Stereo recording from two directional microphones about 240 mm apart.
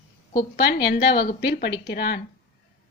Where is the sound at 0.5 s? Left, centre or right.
Left.